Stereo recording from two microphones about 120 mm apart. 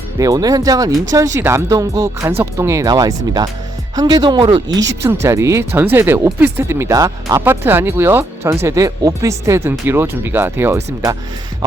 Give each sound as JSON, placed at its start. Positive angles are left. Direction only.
{"t": 0.2, "sound": "speech", "side_deg": -30}
{"t": 5.0, "sound": "speech", "side_deg": -25}
{"t": 7.4, "sound": "speech", "side_deg": -20}